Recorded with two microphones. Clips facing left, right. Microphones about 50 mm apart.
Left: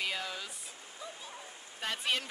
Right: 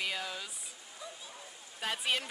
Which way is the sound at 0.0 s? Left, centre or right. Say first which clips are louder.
Even; centre.